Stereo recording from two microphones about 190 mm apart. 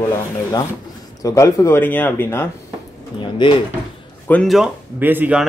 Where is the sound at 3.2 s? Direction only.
25° left (ahead or behind).